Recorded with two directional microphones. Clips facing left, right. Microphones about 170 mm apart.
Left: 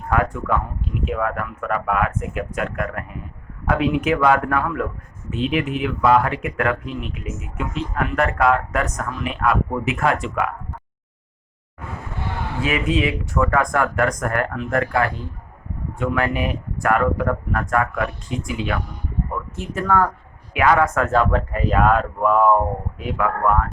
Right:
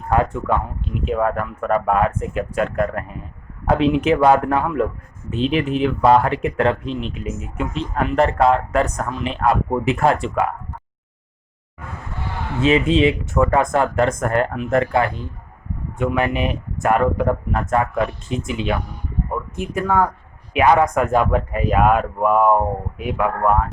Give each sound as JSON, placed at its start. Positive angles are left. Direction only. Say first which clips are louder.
{"t": 0.1, "sound": "a man's voice", "louder": "right 2 dB", "side_deg": -25}
{"t": 12.5, "sound": "speech", "louder": "right 6 dB", "side_deg": -25}